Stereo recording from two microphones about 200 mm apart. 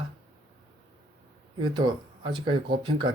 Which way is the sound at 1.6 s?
20° right (ahead or behind).